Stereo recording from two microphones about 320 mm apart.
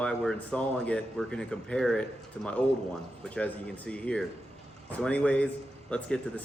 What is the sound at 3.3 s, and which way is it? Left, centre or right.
Speech, centre.